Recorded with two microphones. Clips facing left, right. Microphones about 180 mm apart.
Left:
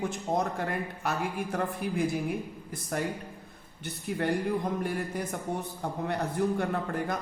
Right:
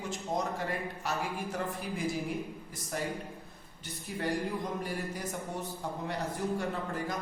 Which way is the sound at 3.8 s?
60° left (ahead or behind).